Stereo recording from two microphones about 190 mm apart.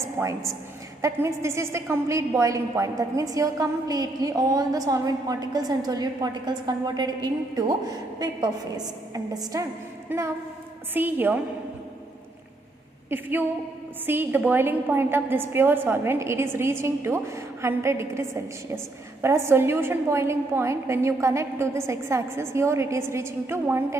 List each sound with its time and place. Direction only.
0.2 s a woman's voice: 15° right (ahead or behind)
13.1 s a woman's voice: 10° right (ahead or behind)